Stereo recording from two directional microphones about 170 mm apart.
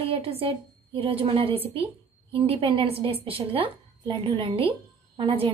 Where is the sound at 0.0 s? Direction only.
35° right (ahead or behind).